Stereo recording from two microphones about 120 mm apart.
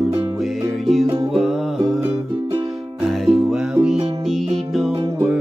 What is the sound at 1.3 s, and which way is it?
Music, centre (ahead or behind).